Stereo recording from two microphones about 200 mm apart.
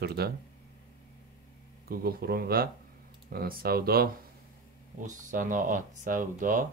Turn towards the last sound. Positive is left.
turn(degrees=-40)  # may be behind; listen again after turning